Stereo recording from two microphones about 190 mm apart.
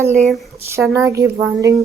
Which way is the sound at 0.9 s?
15° right (ahead or behind).